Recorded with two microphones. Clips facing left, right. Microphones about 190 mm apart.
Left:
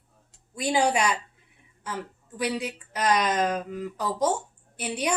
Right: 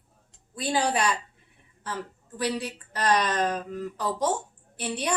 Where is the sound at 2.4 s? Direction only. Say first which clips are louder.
Even; 10° left (ahead or behind).